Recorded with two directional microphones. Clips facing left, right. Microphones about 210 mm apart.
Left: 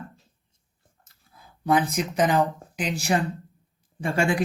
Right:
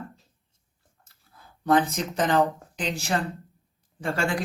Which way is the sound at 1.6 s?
10° left (ahead or behind).